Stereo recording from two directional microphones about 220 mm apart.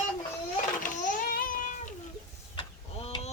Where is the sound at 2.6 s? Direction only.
25° left (ahead or behind).